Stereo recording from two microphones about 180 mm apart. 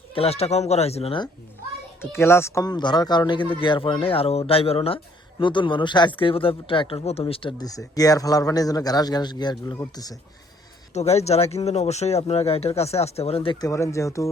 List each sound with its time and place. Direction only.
0.1 s speech: 35° left (ahead or behind)
2.0 s speech: 15° left (ahead or behind)
10.9 s speech: 35° left (ahead or behind)
13.7 s speech: 15° left (ahead or behind)